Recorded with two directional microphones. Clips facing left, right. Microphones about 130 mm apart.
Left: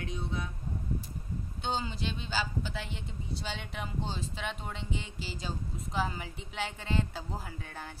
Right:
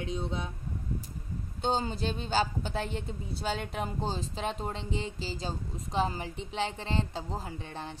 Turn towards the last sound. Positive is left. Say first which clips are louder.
# right 4 dB
turn(degrees=-25)  # may be behind; listen again after turning